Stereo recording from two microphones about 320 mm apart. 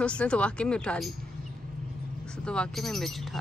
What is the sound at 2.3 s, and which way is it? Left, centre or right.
Speech, centre.